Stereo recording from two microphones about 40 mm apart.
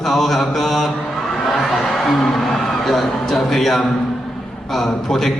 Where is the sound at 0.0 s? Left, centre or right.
Centre.